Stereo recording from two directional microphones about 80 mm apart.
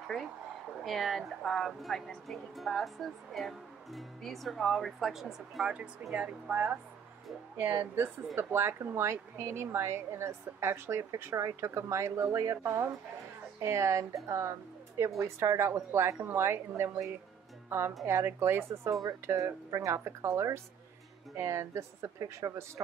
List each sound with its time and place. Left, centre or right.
0.8 s speech: centre
6.1 s a woman's voice: centre; by 22.7 s right